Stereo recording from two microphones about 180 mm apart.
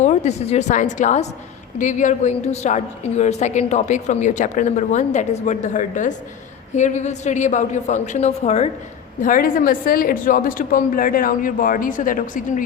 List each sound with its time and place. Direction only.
0.0 s a woman's voice: 40° left (ahead or behind)
9.2 s a woman's voice: 50° left (ahead or behind)